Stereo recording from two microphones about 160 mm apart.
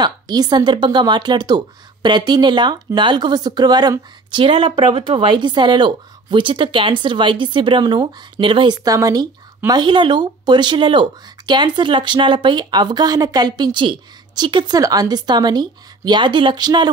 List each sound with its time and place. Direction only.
0.0 s speech: 25° right (ahead or behind)